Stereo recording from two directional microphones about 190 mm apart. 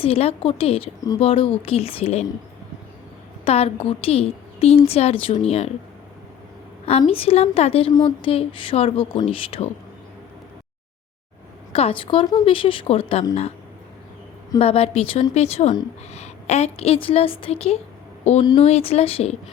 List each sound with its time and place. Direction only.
0.0 s a woman's voice: 30° left (ahead or behind)
3.4 s a woman's voice: 30° left (ahead or behind)
7.0 s speech: 30° left (ahead or behind)
11.7 s speech: 30° left (ahead or behind)
14.6 s a woman's voice: 30° left (ahead or behind)